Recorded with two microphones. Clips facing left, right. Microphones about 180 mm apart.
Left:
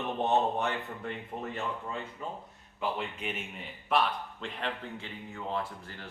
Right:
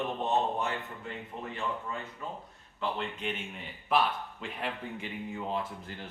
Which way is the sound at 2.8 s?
5° left (ahead or behind).